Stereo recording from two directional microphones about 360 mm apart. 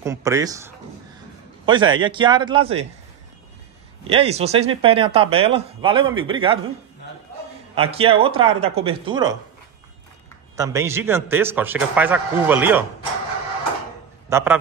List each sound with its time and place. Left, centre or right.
0.0 s speech: centre
4.1 s speech: centre
7.7 s speech: centre
10.5 s a man's voice: centre
14.3 s speech: centre